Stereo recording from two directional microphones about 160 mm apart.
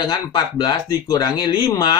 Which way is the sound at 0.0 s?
25° left (ahead or behind).